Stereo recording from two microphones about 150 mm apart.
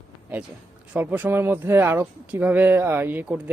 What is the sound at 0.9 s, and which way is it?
Speech, 10° right (ahead or behind).